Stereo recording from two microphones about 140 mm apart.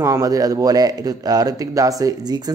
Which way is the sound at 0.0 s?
25° right (ahead or behind).